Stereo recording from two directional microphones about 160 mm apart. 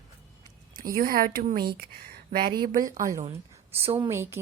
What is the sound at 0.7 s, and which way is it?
Speech, 65° right (ahead or behind).